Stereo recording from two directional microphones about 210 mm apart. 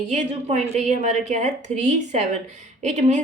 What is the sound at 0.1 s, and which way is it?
A woman's voice, 35° right (ahead or behind).